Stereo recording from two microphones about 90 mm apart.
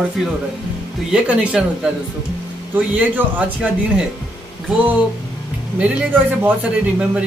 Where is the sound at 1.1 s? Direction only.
10° right (ahead or behind).